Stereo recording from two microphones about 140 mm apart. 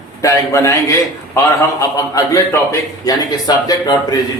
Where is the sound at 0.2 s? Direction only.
20° left (ahead or behind).